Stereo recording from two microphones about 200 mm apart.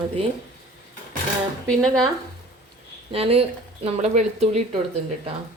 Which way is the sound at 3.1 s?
30° right (ahead or behind).